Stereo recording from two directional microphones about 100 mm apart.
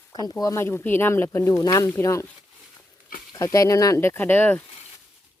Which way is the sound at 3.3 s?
35° left (ahead or behind).